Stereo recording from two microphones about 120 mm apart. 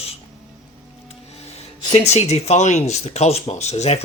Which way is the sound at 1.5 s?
65° left (ahead or behind).